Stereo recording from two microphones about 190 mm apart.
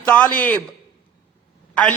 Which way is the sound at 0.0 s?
10° left (ahead or behind).